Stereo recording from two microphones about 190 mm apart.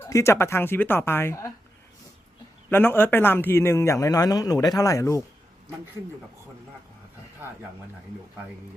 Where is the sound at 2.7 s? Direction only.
10° left (ahead or behind).